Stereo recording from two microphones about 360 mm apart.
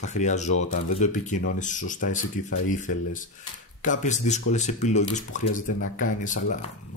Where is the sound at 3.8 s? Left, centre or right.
Left.